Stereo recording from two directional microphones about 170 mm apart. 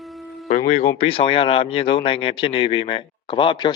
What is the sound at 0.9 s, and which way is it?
Speech, 35° left (ahead or behind).